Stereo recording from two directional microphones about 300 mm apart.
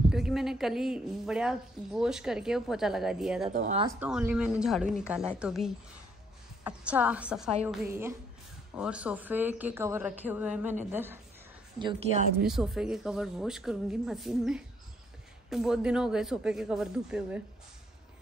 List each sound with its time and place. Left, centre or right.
0.1 s a woman's voice: centre
3.5 s a woman's voice: right
3.8 s a woman's voice: centre
11.8 s a woman's voice: right
12.4 s a woman's voice: centre